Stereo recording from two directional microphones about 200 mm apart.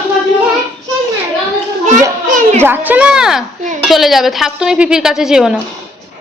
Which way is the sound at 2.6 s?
10° right (ahead or behind).